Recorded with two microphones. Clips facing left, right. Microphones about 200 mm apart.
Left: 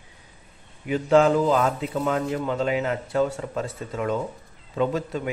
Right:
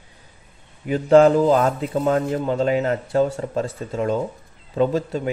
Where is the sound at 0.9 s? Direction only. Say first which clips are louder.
Right 5 dB; 40° right (ahead or behind).